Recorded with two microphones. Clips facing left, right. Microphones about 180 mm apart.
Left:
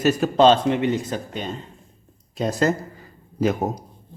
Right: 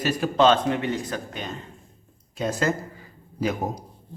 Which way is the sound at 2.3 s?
35° left (ahead or behind).